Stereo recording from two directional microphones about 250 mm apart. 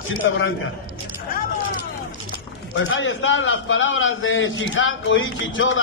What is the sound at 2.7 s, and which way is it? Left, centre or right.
A man's voice, left.